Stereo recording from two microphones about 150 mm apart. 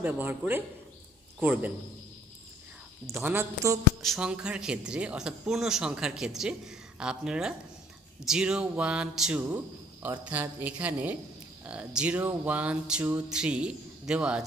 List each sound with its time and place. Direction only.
0.0 s speech: 15° right (ahead or behind)
3.1 s speech: 15° right (ahead or behind)
4.0 s speech: 5° right (ahead or behind)